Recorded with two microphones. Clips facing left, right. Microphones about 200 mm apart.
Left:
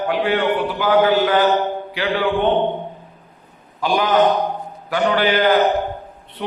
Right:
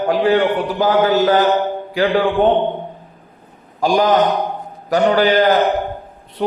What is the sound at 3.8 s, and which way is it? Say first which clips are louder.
A man's voice: right 3 dB; 40° right (ahead or behind).